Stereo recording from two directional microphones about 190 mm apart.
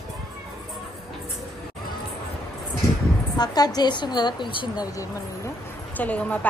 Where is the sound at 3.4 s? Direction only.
20° left (ahead or behind).